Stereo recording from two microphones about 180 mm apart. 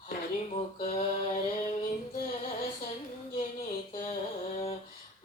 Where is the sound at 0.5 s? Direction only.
40° left (ahead or behind).